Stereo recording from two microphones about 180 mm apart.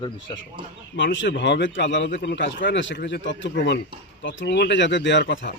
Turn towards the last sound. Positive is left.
turn(degrees=85)